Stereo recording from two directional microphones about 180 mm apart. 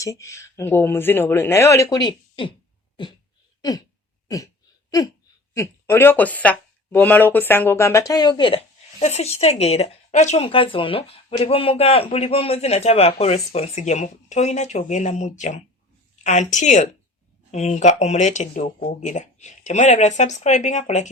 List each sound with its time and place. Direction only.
0.0 s speech: 15° left (ahead or behind)
3.6 s a sound: 20° left (ahead or behind)
5.5 s speech: 10° left (ahead or behind); by 21.1 s 40° left (ahead or behind)